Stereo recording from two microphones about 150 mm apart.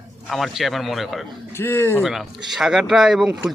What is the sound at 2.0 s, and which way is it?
Speech, centre (ahead or behind).